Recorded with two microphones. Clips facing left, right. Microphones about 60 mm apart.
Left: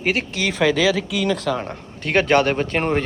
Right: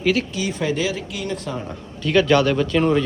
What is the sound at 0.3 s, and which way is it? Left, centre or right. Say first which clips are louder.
Speech: left 4 dB; left.